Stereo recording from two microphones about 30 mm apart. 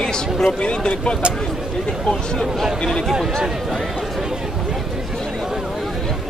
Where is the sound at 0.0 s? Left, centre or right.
Left.